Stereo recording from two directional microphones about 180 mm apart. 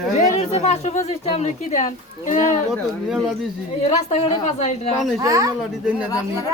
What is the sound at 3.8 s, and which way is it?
A woman's voice, 35° left (ahead or behind).